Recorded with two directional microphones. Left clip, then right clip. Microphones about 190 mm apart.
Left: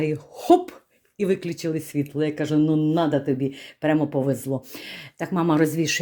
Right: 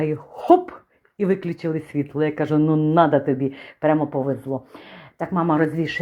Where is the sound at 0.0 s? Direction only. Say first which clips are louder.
Right 2 dB; 15° left (ahead or behind).